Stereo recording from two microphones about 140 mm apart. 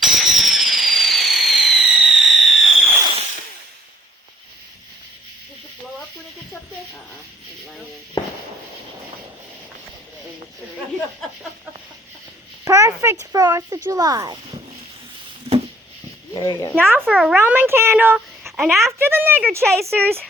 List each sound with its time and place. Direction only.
0.0 s fireworks: centre (ahead or behind)
8.2 s fireworks: 30° left (ahead or behind)
12.6 s speech: 20° right (ahead or behind)
15.5 s a sound: 40° right (ahead or behind)
16.3 s speech: 25° left (ahead or behind)
16.7 s speech: 15° right (ahead or behind)
18.4 s a sound: 5° right (ahead or behind)
18.9 s speech: 15° right (ahead or behind)